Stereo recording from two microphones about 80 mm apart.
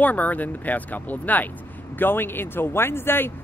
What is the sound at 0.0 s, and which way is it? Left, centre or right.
Speech, centre.